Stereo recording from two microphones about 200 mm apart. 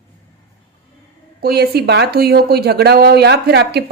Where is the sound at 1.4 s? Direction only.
50° right (ahead or behind).